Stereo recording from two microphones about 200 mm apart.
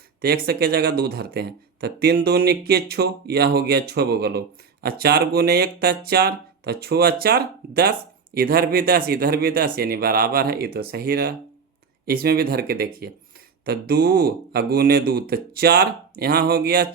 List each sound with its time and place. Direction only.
0.2 s speech: 55° right (ahead or behind)